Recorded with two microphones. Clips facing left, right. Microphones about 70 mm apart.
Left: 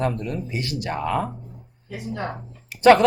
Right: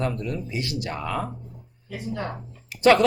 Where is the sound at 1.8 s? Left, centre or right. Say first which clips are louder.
Left 1 dB; centre.